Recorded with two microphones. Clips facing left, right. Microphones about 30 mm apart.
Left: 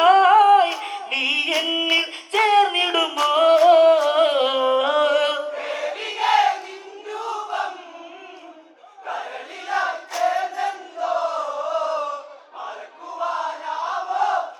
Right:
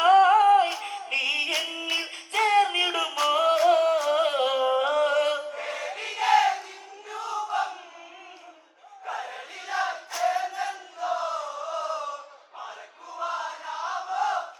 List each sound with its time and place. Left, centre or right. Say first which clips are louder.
0.0 s humming: left 4 dB; left
0.7 s singing: left 5 dB; left
1.1 s music: left 4 dB; left
2.1 s a sound: left 3 dB; left
3.3 s music: left 8 dB; left
4.0 s chant: left 6 dB; left
9.0 s a sound: left 4 dB; left
10.2 s choir: left 4 dB; left
10.6 s crowd: left 6 dB; left
13.1 s a sound: left 6 dB; left
13.6 s crowd: left 6 dB; left